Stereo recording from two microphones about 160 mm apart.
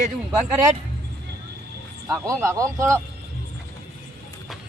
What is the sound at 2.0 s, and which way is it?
Speech, 20° right (ahead or behind).